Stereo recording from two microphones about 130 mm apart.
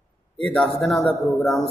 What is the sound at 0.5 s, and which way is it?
Mantra, centre (ahead or behind).